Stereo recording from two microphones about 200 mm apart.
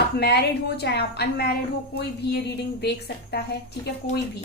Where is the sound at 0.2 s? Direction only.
55° left (ahead or behind).